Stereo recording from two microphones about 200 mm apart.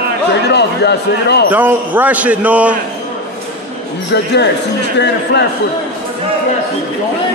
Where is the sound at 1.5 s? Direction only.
10° right (ahead or behind).